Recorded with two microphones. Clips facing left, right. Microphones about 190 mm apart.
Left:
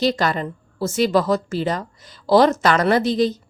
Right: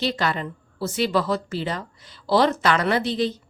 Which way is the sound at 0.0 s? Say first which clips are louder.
Left 5 dB; 40° left (ahead or behind).